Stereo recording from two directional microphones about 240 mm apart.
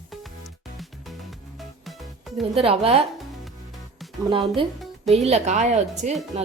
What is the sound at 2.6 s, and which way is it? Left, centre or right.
Speech, right.